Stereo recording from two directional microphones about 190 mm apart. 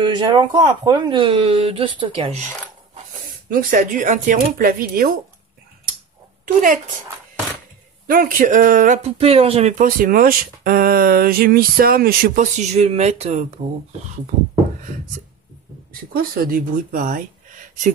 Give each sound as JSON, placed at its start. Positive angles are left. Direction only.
{"t": 0.0, "sound": "speech", "side_deg": -25}
{"t": 3.4, "sound": "speech", "side_deg": -45}
{"t": 6.4, "sound": "speech", "side_deg": -45}
{"t": 8.1, "sound": "speech", "side_deg": -50}
{"t": 12.5, "sound": "speech", "side_deg": -35}
{"t": 16.1, "sound": "speech", "side_deg": -50}